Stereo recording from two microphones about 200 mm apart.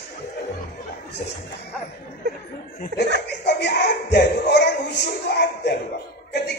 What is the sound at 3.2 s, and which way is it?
Music, 55° left (ahead or behind).